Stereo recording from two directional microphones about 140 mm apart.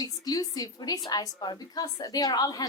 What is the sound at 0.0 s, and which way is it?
A woman's voice, 25° left (ahead or behind).